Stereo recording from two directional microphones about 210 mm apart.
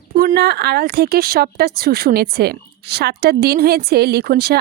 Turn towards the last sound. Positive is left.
turn(degrees=-45)  # may be behind; listen again after turning